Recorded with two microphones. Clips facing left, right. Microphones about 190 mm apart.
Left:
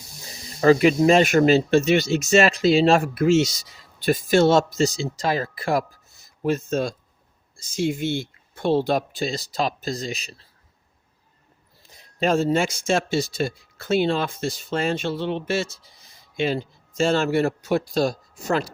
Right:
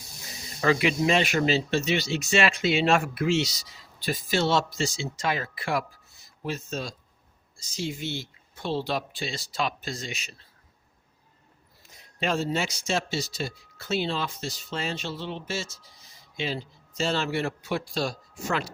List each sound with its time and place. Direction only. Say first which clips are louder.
0.6 s speech: left 8 dB; 40° left (ahead or behind)
12.2 s speech: left 7 dB; 45° left (ahead or behind)